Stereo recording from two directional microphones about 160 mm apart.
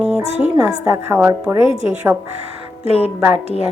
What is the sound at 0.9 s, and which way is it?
Speech, 15° right (ahead or behind).